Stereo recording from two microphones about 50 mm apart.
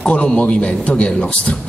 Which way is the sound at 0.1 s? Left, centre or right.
Left.